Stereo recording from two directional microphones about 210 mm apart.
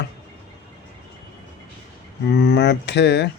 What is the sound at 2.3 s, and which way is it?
Speech, 55° left (ahead or behind).